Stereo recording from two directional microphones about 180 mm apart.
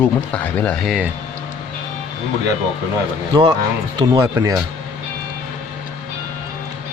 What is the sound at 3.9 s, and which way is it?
Speech, 25° right (ahead or behind).